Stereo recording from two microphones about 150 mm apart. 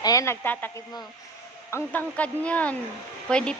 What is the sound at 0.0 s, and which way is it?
Speech, 20° left (ahead or behind).